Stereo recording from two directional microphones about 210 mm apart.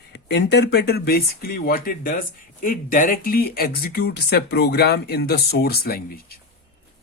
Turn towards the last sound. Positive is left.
turn(degrees=45)  # may be behind; listen again after turning